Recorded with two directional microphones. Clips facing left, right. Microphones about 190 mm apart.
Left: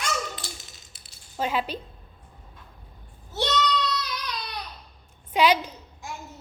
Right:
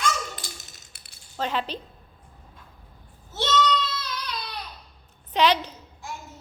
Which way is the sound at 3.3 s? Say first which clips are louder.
Even; 15° left (ahead or behind).